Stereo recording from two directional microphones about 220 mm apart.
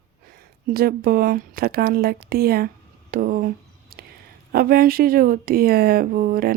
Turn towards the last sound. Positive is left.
turn(degrees=-40)  # may be behind; listen again after turning